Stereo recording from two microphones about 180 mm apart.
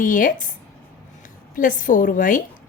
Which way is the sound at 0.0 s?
50° left (ahead or behind).